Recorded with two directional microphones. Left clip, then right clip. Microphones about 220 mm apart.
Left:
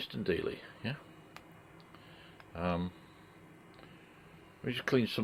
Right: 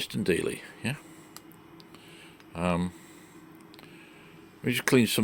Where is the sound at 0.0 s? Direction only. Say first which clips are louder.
Right 6 dB; 30° right (ahead or behind).